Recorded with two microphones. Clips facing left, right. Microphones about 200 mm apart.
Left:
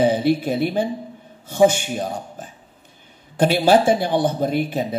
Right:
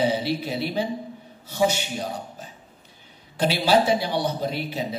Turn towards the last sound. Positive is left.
turn(degrees=50)  # may be behind; listen again after turning